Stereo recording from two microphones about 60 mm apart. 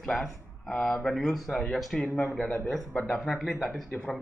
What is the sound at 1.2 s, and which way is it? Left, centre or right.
Speech, centre.